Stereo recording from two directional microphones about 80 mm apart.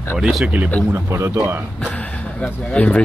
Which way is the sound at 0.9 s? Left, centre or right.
Right.